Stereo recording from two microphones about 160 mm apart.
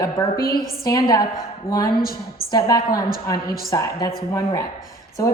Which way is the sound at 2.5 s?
25° left (ahead or behind).